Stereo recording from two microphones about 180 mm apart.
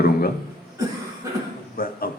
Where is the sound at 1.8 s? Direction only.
55° left (ahead or behind).